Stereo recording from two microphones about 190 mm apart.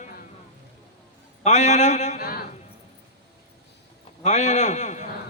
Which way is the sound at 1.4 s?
40° left (ahead or behind).